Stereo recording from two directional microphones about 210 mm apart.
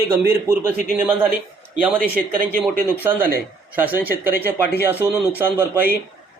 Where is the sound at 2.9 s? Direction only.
10° right (ahead or behind).